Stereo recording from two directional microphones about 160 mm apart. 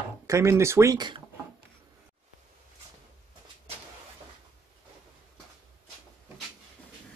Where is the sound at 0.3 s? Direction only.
20° right (ahead or behind).